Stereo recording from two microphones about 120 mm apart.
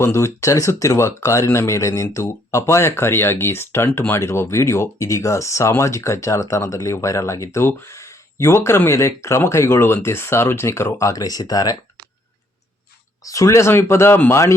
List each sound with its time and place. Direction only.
0.0 s speech: 20° left (ahead or behind)
13.2 s speech: 25° left (ahead or behind)